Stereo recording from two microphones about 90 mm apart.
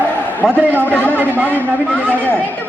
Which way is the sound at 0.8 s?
20° left (ahead or behind).